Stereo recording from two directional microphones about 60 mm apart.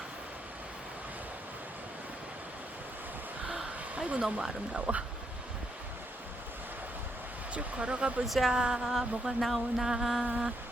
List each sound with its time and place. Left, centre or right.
3.9 s speech: centre
7.5 s speech: centre
8.3 s a sound: centre